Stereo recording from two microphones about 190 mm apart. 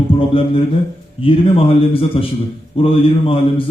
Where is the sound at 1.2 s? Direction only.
30° left (ahead or behind).